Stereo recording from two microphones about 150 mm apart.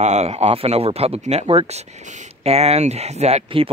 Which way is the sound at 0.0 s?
50° right (ahead or behind).